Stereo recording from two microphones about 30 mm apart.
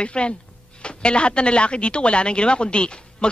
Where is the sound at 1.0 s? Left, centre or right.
Left.